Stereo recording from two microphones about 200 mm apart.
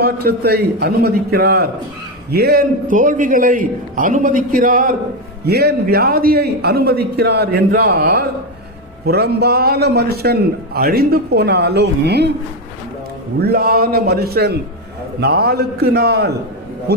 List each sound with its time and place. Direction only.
0.0 s a man's voice: 50° right (ahead or behind)
13.4 s a man's voice: 50° right (ahead or behind)